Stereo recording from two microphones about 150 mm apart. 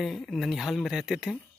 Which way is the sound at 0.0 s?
Centre (ahead or behind).